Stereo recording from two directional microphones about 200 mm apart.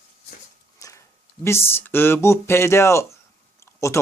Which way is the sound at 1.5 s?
10° left (ahead or behind).